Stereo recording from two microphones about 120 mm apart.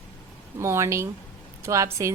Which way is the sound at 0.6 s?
25° right (ahead or behind).